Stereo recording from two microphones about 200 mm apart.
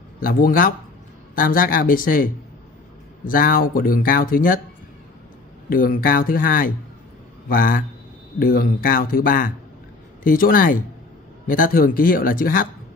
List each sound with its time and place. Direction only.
0.2 s speech: 45° left (ahead or behind)
5.7 s speech: 45° left (ahead or behind)